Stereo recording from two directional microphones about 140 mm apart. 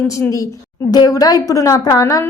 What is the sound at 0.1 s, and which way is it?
A woman's voice, 20° left (ahead or behind).